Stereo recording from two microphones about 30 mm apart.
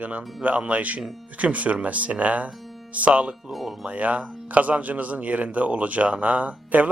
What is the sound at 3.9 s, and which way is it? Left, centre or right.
Speech, right.